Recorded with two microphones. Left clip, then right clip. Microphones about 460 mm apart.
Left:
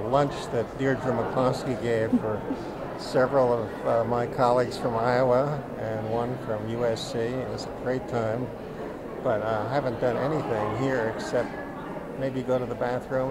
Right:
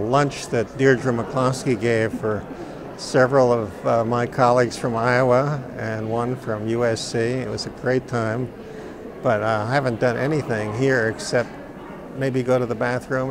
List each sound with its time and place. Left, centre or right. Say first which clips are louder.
0.1 s speech: right 3 dB; right
3.1 s speech: right 6 dB; right